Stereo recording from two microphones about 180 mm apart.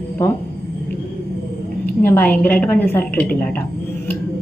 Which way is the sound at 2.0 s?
10° left (ahead or behind).